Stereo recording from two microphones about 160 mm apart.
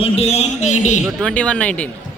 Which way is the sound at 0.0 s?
40° left (ahead or behind).